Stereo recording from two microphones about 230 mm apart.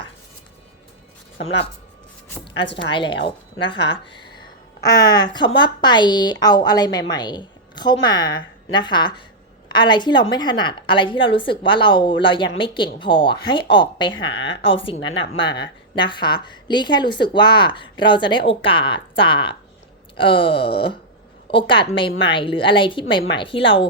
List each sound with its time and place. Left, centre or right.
2.9 s speech: left
3.8 s speech: left
4.8 s a woman's voice: centre